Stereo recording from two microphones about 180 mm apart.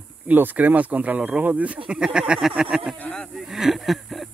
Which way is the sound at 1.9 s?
5° right (ahead or behind).